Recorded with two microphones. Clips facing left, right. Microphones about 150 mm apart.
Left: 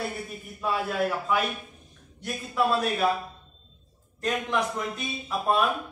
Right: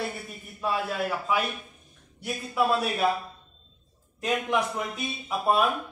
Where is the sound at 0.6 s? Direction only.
Centre (ahead or behind).